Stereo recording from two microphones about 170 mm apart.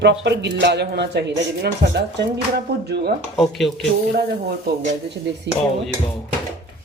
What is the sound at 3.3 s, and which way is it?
Speech, centre (ahead or behind).